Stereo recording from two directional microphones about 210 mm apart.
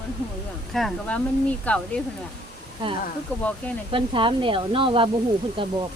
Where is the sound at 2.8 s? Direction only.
20° right (ahead or behind).